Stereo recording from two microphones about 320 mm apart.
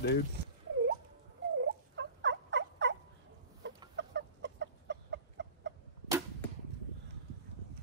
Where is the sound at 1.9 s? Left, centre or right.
Right.